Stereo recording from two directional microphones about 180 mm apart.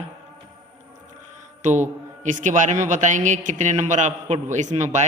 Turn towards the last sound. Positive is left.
turn(degrees=-40)  # may be behind; listen again after turning